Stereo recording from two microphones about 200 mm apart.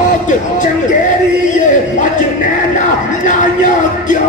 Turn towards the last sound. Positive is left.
turn(degrees=40)  # may be behind; listen again after turning